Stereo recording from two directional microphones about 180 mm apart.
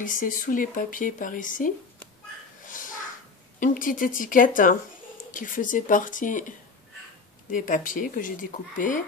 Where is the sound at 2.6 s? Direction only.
45° left (ahead or behind).